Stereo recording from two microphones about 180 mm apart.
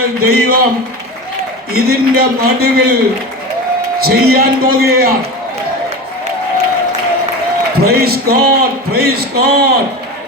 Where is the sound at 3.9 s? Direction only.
60° right (ahead or behind).